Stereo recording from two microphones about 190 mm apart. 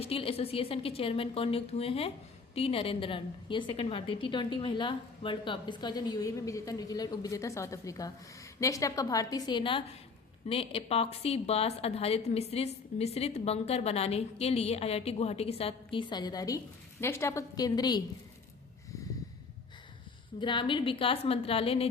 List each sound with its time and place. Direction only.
0.0 s a woman's voice: 30° left (ahead or behind)
20.4 s a woman's voice: 25° left (ahead or behind)